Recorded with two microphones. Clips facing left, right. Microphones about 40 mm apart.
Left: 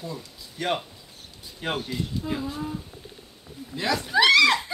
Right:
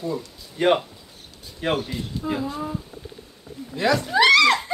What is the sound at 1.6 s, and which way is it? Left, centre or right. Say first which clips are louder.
Speech: right 4 dB; centre.